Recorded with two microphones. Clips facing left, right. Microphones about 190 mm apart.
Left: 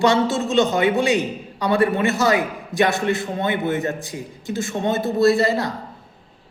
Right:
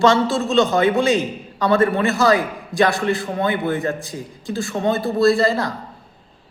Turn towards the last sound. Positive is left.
turn(degrees=20)  # may be behind; listen again after turning